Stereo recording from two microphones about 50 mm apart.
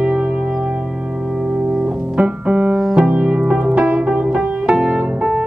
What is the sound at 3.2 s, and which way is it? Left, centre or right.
Music, centre.